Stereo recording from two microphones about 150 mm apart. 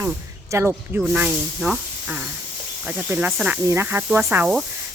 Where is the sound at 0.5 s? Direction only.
20° right (ahead or behind).